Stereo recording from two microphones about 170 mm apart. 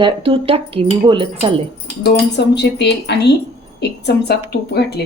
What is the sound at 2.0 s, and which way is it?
Speech, 80° left.